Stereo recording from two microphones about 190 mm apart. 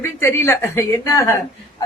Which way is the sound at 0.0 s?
15° left (ahead or behind).